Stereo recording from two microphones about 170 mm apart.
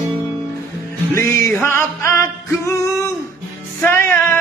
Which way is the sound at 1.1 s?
15° left (ahead or behind).